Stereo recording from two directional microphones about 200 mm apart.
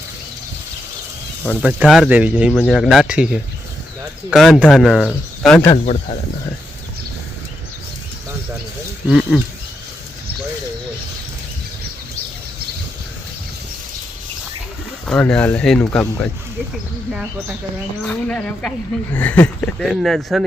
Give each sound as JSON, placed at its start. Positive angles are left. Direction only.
{"t": 1.6, "sound": "speech", "side_deg": 0}
{"t": 5.7, "sound": "speech", "side_deg": 35}
{"t": 9.0, "sound": "speech", "side_deg": 0}
{"t": 15.0, "sound": "speech", "side_deg": 5}
{"t": 16.7, "sound": "speech", "side_deg": -5}